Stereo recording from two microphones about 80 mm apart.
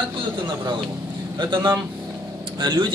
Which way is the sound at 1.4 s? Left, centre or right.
Right.